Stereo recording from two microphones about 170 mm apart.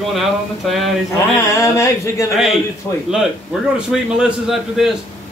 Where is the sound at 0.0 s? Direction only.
Centre (ahead or behind).